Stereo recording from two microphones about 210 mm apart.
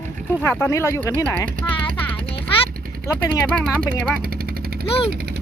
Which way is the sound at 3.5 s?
5° left (ahead or behind).